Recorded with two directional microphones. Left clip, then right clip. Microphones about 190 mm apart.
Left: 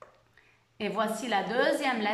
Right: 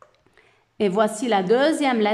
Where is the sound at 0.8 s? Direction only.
35° right (ahead or behind).